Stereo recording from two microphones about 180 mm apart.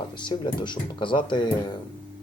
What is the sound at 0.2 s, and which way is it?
Speech, 25° left (ahead or behind).